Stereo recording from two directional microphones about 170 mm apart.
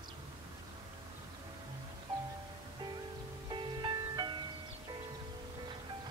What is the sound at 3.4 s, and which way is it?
Music, 25° right (ahead or behind).